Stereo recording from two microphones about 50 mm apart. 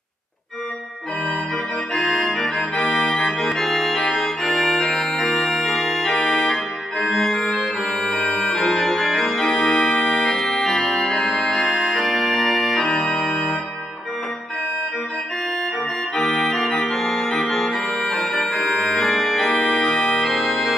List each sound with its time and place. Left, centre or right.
2.0 s organ: centre
2.2 s organ: centre
9.5 s music: centre
10.4 s organ: centre
12.7 s organ: centre
16.2 s organ: centre